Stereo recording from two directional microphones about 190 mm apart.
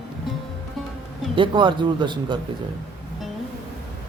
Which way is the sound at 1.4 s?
25° right (ahead or behind).